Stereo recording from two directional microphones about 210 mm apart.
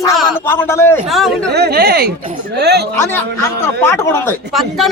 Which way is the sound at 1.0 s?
Centre (ahead or behind).